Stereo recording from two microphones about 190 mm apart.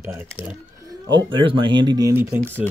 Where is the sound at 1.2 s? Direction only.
25° right (ahead or behind).